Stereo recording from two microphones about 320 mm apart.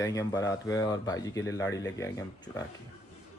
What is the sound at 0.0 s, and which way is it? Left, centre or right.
Speech, centre.